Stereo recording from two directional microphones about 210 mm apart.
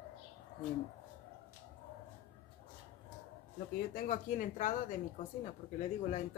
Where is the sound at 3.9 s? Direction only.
40° left (ahead or behind).